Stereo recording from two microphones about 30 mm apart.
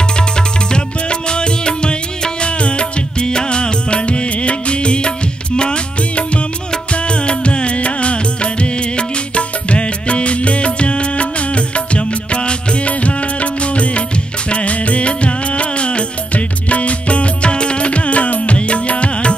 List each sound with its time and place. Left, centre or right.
1.3 s music: left
12.8 s music: left